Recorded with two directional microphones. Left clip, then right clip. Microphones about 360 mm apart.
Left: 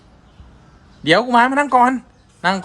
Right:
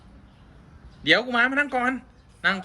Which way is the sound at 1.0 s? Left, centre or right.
Left.